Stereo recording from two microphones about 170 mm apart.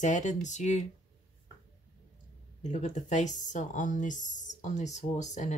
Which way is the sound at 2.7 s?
45° left (ahead or behind).